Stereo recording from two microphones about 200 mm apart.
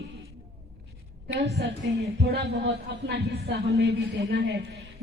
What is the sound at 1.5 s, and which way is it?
Speech, 55° right (ahead or behind).